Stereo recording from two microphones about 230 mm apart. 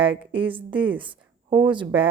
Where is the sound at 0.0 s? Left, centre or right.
Right.